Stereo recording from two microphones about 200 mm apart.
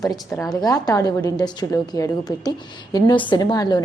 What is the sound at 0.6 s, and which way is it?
A woman's voice, 20° left (ahead or behind).